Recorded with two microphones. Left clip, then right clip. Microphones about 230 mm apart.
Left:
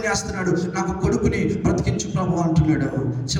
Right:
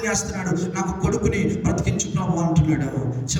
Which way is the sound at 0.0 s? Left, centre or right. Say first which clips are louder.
Left 2 dB; centre.